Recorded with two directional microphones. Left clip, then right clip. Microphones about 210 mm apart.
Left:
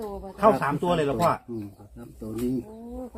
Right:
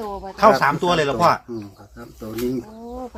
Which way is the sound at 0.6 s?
40° right (ahead or behind).